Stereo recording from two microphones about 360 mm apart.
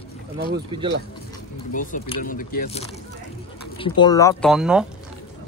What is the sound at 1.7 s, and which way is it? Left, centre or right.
Speech, left.